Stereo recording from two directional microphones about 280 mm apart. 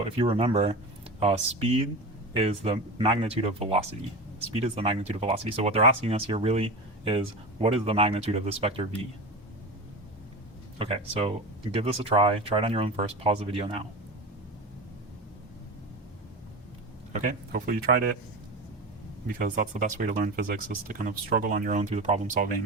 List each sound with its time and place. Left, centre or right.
0.2 s speech: centre
10.8 s speech: centre
17.1 s speech: right
19.4 s speech: right